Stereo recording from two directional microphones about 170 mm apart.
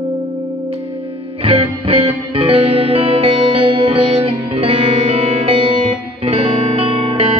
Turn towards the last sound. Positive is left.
turn(degrees=-35)  # may be behind; listen again after turning